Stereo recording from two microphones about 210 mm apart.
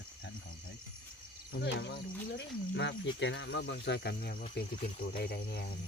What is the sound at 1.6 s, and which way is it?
Speech, 55° left (ahead or behind).